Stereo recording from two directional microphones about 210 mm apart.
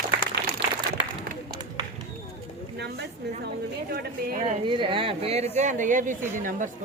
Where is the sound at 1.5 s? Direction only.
20° right (ahead or behind).